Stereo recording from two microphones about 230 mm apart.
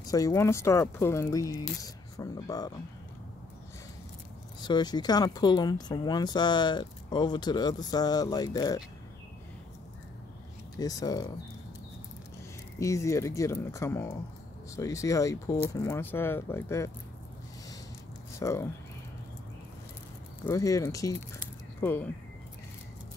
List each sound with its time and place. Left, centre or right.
0.0 s speech: centre
4.6 s speech: centre
10.8 s speech: centre
12.7 s speech: centre
18.4 s speech: centre
20.4 s speech: centre